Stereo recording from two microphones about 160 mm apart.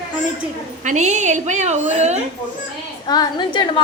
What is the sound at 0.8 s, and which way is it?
A woman's voice, 50° right (ahead or behind).